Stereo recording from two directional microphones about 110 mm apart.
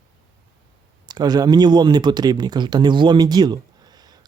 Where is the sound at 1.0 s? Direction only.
40° right (ahead or behind).